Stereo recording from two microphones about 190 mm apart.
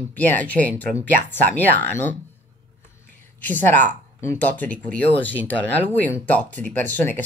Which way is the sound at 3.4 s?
10° left (ahead or behind).